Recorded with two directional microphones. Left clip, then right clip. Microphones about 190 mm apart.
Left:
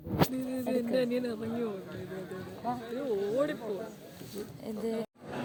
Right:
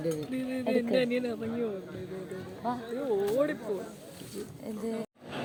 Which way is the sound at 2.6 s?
50° right (ahead or behind).